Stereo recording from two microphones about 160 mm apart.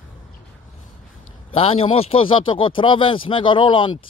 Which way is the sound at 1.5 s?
35° left (ahead or behind).